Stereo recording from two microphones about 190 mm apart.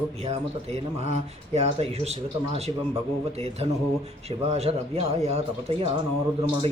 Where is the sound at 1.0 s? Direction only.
35° right (ahead or behind).